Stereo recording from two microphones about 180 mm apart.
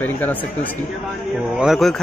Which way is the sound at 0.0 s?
10° left (ahead or behind).